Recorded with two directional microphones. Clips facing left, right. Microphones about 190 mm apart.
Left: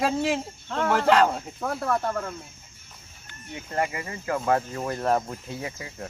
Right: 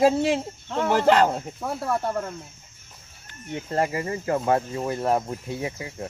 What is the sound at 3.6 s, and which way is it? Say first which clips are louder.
Speech: right 3 dB; 30° right (ahead or behind).